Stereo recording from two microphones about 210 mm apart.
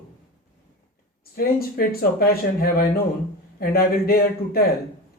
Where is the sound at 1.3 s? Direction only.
45° left (ahead or behind).